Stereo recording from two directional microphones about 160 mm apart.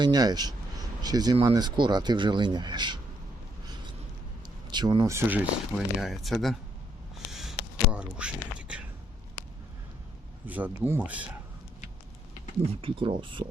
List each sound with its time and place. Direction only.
0.0 s speech: 25° right (ahead or behind)
4.7 s speech: 25° right (ahead or behind); by 6.6 s centre (ahead or behind)
7.3 s a sound: centre (ahead or behind)
7.9 s speech: 5° right (ahead or behind)
10.4 s speech: 10° right (ahead or behind)
12.8 s speech: 35° right (ahead or behind)